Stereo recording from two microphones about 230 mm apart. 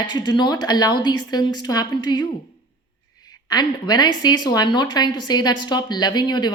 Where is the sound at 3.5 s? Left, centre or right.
Centre.